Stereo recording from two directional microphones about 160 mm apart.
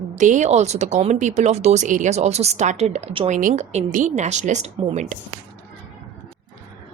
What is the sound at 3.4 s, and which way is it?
Speech, 50° right (ahead or behind).